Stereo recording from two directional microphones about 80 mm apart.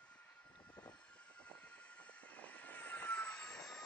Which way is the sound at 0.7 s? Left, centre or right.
Centre.